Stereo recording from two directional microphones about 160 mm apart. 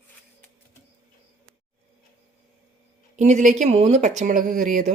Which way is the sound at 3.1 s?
50° right (ahead or behind).